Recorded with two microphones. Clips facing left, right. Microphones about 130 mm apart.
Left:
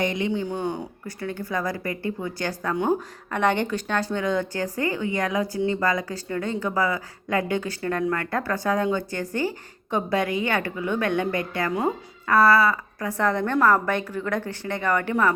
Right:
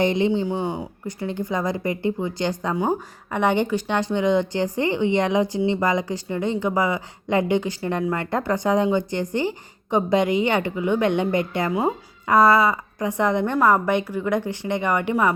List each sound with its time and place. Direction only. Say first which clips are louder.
0.0 s a woman's voice: right 5 dB; 30° right (ahead or behind)
0.4 s speech: right 2 dB; 10° right (ahead or behind)
1.0 s a woman's voice: right 5 dB; 20° right (ahead or behind)
2.7 s speech: left 2 dB; centre (ahead or behind)
3.2 s a woman's voice: right 2 dB; 10° right (ahead or behind)
11.7 s speech: right 2 dB; 10° right (ahead or behind)